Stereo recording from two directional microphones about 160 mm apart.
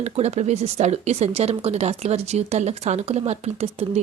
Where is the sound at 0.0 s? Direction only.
45° right (ahead or behind).